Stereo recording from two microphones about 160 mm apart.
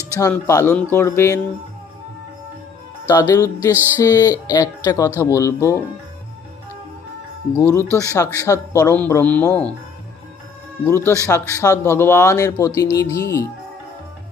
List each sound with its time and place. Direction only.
0.1 s speech: 20° left (ahead or behind)
3.1 s speech: 20° left (ahead or behind)
3.7 s music: 10° right (ahead or behind)
4.0 s speech: 20° left (ahead or behind)
7.5 s speech: 15° left (ahead or behind)
10.8 s speech: 15° left (ahead or behind)